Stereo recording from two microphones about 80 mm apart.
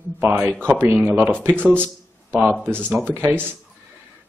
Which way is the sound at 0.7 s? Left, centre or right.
Right.